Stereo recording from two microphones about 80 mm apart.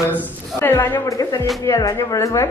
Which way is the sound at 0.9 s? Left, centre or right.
Left.